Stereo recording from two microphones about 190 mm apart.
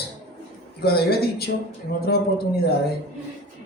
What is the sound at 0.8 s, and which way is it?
A man's voice, 55° left (ahead or behind).